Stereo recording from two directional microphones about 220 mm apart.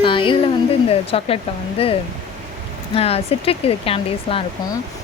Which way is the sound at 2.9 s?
25° left (ahead or behind).